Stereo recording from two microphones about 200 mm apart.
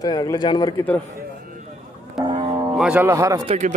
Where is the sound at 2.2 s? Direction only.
25° right (ahead or behind).